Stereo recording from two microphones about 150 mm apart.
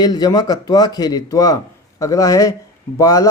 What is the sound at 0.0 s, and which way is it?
Speech, 25° left (ahead or behind).